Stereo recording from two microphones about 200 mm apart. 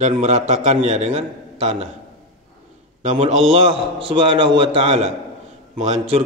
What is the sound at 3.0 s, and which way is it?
A man's voice, 40° right (ahead or behind).